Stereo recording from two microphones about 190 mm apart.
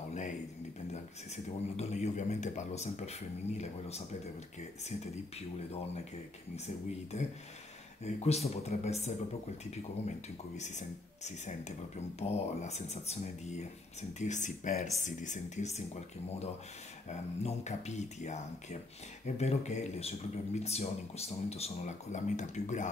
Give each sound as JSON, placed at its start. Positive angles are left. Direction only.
{"t": 0.1, "sound": "a sound", "side_deg": 40}
{"t": 1.3, "sound": "a man's voice", "side_deg": 35}
{"t": 8.0, "sound": "a man's voice", "side_deg": 35}
{"t": 17.1, "sound": "a man's voice", "side_deg": 35}